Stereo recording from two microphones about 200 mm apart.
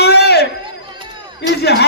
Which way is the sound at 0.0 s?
55° left (ahead or behind).